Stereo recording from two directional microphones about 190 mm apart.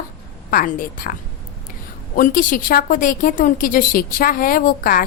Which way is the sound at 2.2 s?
45° left (ahead or behind).